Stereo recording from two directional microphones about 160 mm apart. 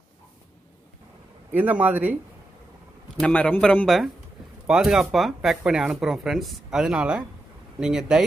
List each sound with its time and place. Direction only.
1.5 s speech: 10° right (ahead or behind)
3.2 s speech: 5° left (ahead or behind)